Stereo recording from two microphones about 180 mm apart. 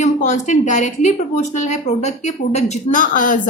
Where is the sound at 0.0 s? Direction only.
40° left (ahead or behind).